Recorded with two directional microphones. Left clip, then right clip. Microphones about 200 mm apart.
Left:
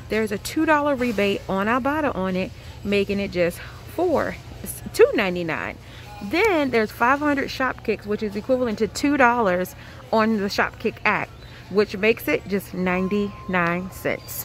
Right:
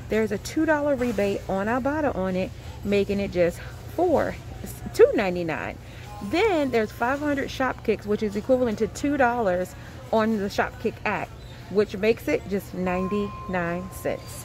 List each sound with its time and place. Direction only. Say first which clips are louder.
0.1 s speech: left 1 dB; 10° left (ahead or behind)
7.5 s speech: left 1 dB; centre (ahead or behind)
9.0 s speech: left 5 dB; 20° left (ahead or behind)